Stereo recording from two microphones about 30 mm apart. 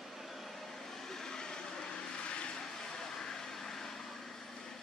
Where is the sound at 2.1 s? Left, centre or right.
Left.